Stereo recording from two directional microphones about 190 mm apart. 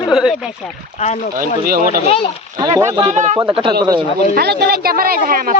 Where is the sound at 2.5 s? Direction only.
20° right (ahead or behind).